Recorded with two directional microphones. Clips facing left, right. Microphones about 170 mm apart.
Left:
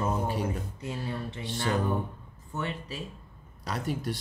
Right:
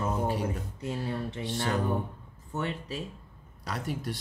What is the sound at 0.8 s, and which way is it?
Speech, 40° right (ahead or behind).